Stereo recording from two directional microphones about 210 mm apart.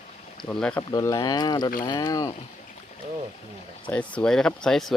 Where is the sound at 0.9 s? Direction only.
15° left (ahead or behind).